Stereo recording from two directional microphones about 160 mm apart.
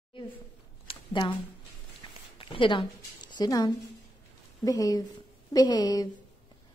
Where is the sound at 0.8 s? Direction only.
35° left (ahead or behind).